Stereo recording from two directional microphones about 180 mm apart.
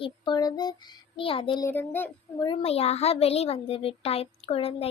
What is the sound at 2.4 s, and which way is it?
A child's voice, 30° left (ahead or behind).